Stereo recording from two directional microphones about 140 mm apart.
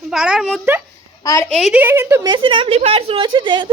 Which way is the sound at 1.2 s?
20° left (ahead or behind).